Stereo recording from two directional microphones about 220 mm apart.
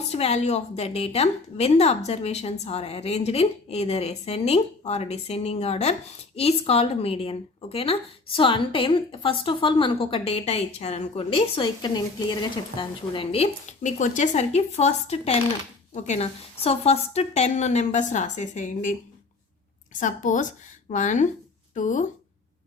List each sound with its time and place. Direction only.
0.1 s a woman's voice: 30° left (ahead or behind)
20.0 s a woman's voice: 35° left (ahead or behind)